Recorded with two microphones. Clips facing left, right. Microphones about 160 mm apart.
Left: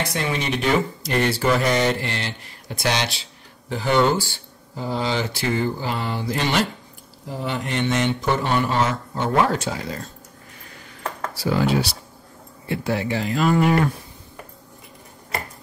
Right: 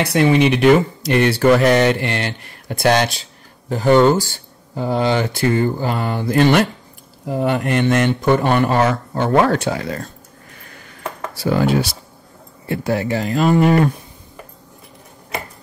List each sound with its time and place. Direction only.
0.0 s speech: 65° right (ahead or behind)
11.4 s speech: 50° right (ahead or behind)